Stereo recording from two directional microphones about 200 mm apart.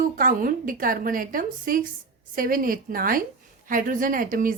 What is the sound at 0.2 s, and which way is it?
A woman's voice, 45° right (ahead or behind).